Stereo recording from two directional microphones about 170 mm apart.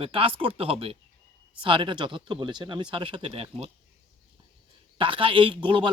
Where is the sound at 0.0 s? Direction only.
30° right (ahead or behind).